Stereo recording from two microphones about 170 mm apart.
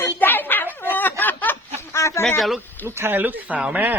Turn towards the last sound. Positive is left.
turn(degrees=-10)  # may be behind; listen again after turning